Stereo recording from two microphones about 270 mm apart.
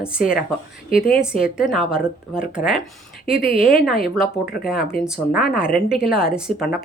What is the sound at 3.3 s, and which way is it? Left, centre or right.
Speech, left.